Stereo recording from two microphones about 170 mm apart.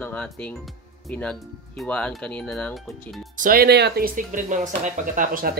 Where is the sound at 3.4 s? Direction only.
60° right (ahead or behind).